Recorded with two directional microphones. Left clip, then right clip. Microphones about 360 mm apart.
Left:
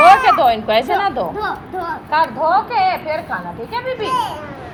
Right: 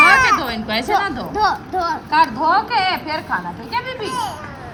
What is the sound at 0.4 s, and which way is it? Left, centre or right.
Speech, centre.